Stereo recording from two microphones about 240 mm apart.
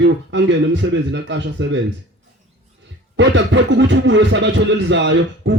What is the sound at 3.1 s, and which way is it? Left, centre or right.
A man's voice, right.